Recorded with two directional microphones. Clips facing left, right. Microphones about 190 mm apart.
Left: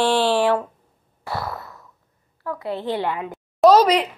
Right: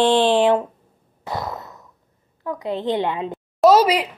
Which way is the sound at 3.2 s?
5° right (ahead or behind).